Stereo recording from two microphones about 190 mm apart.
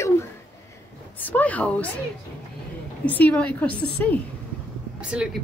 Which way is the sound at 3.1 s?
10° left (ahead or behind).